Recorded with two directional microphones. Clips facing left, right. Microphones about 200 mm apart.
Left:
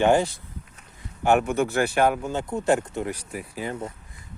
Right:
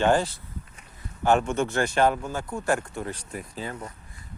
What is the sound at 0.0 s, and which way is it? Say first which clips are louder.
A man's voice: left 2 dB; 15° left (ahead or behind).